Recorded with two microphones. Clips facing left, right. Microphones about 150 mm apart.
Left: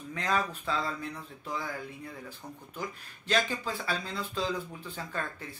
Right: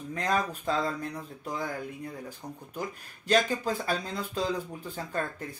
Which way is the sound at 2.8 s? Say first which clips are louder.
Right 2 dB; 40° right (ahead or behind).